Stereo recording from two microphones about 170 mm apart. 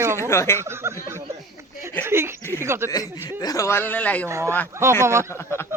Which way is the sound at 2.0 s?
15° right (ahead or behind).